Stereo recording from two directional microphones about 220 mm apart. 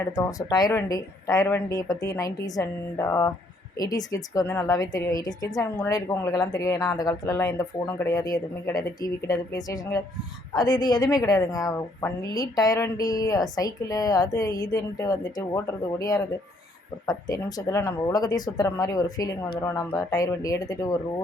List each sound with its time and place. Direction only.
0.0 s a woman's voice: 15° left (ahead or behind)